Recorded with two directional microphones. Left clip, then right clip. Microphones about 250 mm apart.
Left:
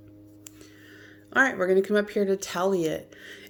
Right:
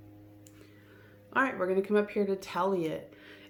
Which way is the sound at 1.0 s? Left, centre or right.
Left.